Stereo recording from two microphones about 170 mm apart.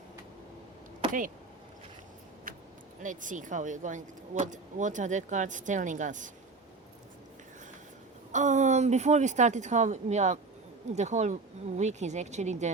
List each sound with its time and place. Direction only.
3.0 s speech: 50° right (ahead or behind)
8.3 s speech: 45° right (ahead or behind)